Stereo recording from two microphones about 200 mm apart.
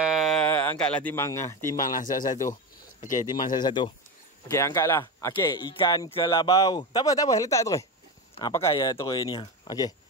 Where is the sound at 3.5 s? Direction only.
20° left (ahead or behind).